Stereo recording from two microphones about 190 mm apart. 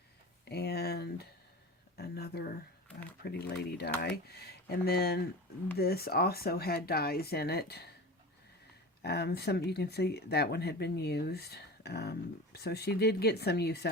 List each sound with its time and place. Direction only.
0.4 s a sound: 55° left (ahead or behind)
3.2 s speech: 60° left (ahead or behind)
9.0 s speech: 60° left (ahead or behind)